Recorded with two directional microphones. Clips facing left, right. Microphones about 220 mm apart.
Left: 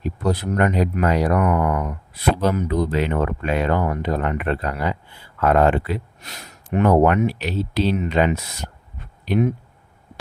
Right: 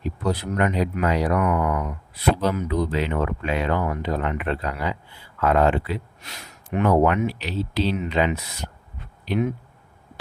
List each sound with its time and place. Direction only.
0.0 s speech: 45° left (ahead or behind)